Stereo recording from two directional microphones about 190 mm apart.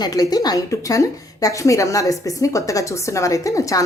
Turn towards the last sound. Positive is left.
turn(degrees=15)  # may be behind; listen again after turning